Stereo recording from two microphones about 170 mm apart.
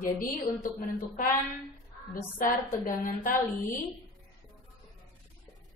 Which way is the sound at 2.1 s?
55° left (ahead or behind).